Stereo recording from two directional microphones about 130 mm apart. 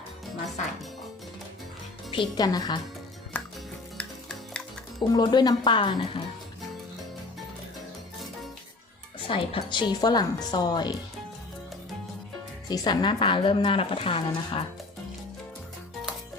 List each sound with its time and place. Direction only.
2.1 s a woman's voice: 30° left (ahead or behind)
3.9 s music: 5° left (ahead or behind)
4.9 s a woman's voice: 30° left (ahead or behind)
9.2 s a woman's voice: 45° left (ahead or behind)
12.6 s a woman's voice: 35° left (ahead or behind)